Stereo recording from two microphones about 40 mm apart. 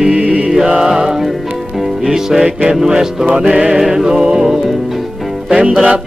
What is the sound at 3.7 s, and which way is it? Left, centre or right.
Music, centre.